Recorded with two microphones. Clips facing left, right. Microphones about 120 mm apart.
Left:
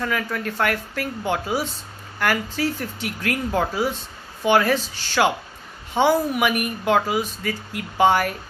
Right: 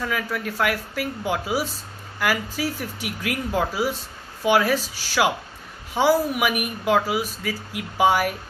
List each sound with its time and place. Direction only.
0.0 s speech: 5° right (ahead or behind)